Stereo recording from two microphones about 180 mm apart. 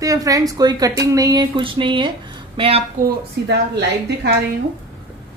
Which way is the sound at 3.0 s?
70° right (ahead or behind).